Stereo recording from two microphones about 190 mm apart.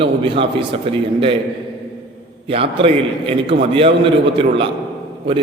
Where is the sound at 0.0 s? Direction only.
30° right (ahead or behind).